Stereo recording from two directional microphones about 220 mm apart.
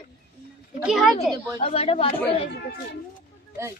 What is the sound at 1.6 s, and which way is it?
Speech, 25° left (ahead or behind).